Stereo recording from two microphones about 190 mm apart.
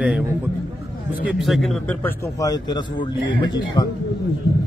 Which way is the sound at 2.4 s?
20° left (ahead or behind).